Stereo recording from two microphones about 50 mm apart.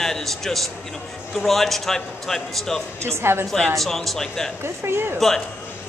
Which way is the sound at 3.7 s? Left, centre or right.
Centre.